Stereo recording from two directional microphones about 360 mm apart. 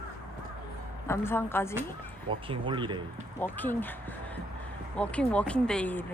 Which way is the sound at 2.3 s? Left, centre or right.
Centre.